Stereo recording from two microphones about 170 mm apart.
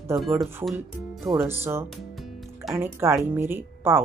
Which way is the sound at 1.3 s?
15° right (ahead or behind).